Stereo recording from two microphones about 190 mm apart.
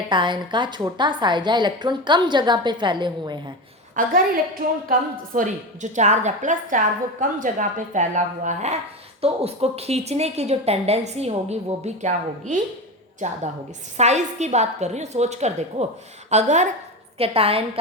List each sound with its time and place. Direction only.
0.1 s a woman's voice: 25° right (ahead or behind)
3.9 s a woman's voice: 50° right (ahead or behind)
13.9 s a woman's voice: 35° right (ahead or behind)